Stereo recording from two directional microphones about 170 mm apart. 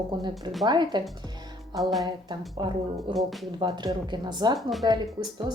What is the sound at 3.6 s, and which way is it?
Speech, 25° right (ahead or behind).